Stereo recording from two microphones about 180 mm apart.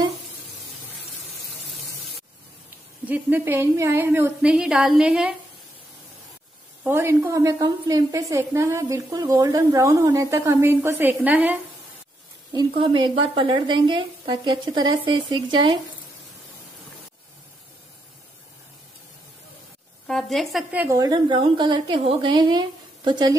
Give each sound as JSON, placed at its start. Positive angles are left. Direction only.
{"t": 3.1, "sound": "a woman's voice", "side_deg": -10}
{"t": 6.8, "sound": "a woman's voice", "side_deg": -15}
{"t": 12.5, "sound": "speech", "side_deg": -25}
{"t": 20.1, "sound": "speech", "side_deg": 0}